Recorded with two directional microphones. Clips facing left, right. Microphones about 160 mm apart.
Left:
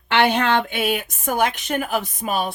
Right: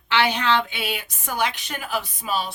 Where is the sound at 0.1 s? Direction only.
50° left (ahead or behind).